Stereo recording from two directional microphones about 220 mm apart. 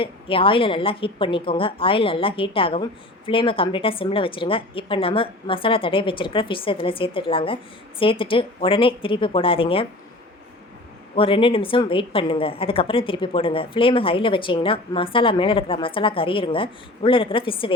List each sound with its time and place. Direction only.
0.0 s a woman's voice: 25° left (ahead or behind)
11.1 s a woman's voice: 25° left (ahead or behind)